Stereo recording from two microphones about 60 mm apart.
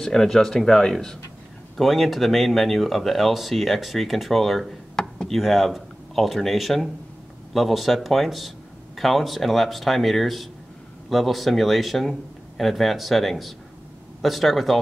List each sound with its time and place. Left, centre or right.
0.0 s speech: centre